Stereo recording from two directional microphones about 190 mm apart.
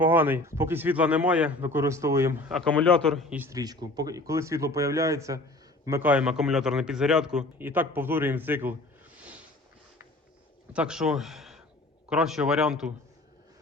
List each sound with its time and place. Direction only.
0.0 s a man's voice: 10° right (ahead or behind)
2.5 s a man's voice: 5° left (ahead or behind)
10.7 s speech: 5° right (ahead or behind)